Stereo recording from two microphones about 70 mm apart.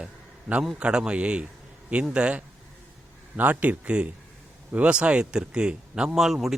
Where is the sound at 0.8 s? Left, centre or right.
Centre.